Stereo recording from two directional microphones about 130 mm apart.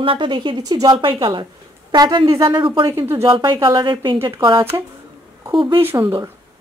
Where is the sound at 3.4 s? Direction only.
40° right (ahead or behind).